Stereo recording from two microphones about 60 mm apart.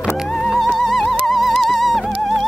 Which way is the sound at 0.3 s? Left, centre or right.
Centre.